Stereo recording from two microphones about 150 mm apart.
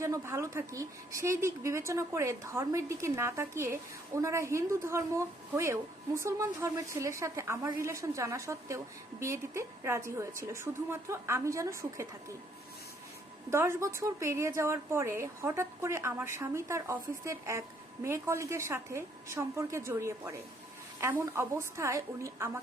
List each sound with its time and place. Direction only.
0.0 s a woman's voice: 20° right (ahead or behind)
13.5 s a woman's voice: 15° right (ahead or behind)